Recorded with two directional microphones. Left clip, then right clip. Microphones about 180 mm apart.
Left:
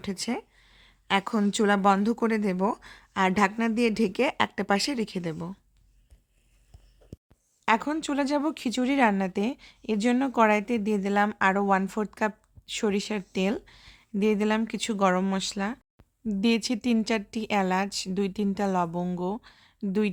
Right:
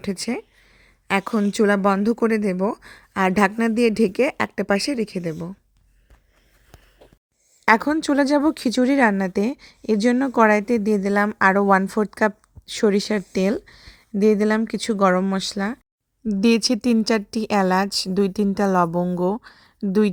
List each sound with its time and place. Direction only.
0.0 s a woman's voice: 25° right (ahead or behind)
7.6 s a woman's voice: 35° right (ahead or behind)